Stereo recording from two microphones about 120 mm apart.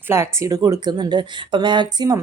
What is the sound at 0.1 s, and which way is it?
Speech, 25° right (ahead or behind).